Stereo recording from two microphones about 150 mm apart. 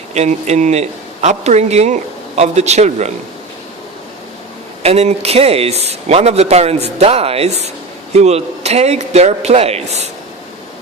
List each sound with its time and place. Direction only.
0.1 s a man's voice: 50° right (ahead or behind)
4.8 s a man's voice: 45° right (ahead or behind)